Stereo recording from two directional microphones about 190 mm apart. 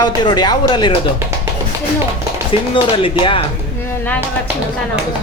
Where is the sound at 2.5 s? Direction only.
25° left (ahead or behind).